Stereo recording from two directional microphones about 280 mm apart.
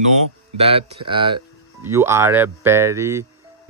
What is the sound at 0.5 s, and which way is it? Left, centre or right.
Speech, right.